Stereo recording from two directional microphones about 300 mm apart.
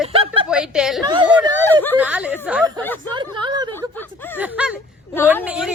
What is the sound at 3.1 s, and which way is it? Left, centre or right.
Speech, centre.